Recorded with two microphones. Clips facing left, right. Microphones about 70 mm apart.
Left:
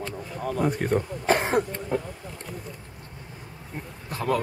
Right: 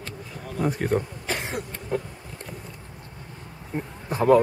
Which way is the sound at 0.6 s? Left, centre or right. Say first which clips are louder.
Right 1 dB; centre.